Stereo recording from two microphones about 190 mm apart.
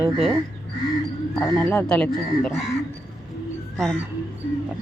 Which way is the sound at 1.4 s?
10° left (ahead or behind).